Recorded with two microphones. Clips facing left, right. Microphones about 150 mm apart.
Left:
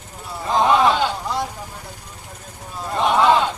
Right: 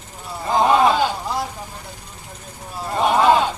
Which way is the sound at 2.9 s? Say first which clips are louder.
Right 1 dB; 10° right (ahead or behind).